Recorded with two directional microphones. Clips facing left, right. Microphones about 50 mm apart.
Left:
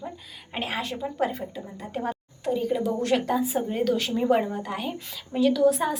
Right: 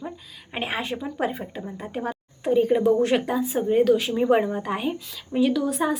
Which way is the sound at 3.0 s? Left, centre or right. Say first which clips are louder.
Right 2 dB; centre.